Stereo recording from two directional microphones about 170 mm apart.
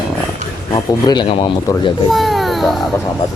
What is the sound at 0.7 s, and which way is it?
Speech, 25° left (ahead or behind).